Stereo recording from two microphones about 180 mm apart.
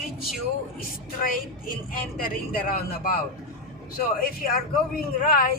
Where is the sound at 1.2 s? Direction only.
50° left (ahead or behind).